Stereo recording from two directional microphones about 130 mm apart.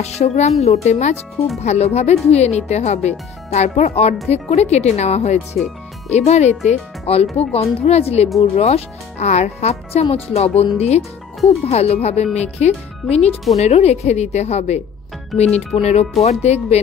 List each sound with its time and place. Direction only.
0.0 s speech: 55° left (ahead or behind)